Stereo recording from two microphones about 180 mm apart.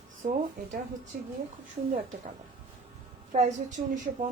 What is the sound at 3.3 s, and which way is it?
Speech, 40° right (ahead or behind).